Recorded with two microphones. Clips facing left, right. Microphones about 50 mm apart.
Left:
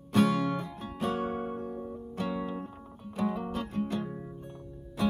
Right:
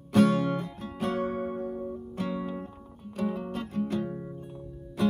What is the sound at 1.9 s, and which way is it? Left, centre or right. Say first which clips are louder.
Music: right 1 dB; centre.